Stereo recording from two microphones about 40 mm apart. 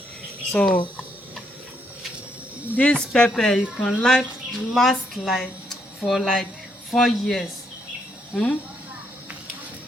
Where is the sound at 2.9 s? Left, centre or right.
Centre.